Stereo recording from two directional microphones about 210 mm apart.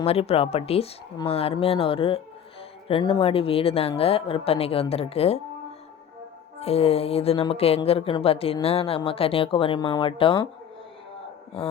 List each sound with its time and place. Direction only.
0.0 s speech: 30° left (ahead or behind)
6.6 s speech: 30° left (ahead or behind)
11.6 s speech: 25° left (ahead or behind)